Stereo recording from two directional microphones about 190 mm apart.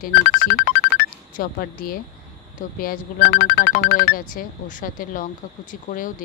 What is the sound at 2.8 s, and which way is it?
Speech, 50° left (ahead or behind).